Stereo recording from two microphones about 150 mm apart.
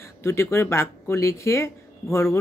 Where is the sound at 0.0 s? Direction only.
15° left (ahead or behind).